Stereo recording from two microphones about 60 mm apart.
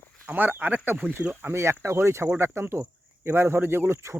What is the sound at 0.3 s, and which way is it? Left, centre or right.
Speech, right.